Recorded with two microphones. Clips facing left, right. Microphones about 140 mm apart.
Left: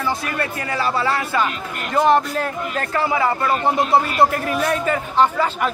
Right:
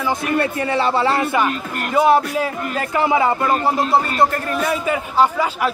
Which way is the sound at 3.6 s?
Centre (ahead or behind).